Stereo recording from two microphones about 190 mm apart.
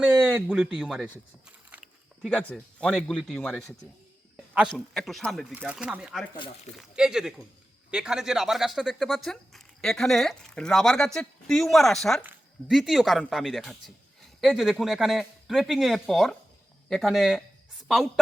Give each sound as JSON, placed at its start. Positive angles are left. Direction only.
{"t": 0.0, "sound": "speech", "side_deg": -5}
{"t": 1.7, "sound": "biting", "side_deg": -10}
{"t": 2.2, "sound": "speech", "side_deg": 5}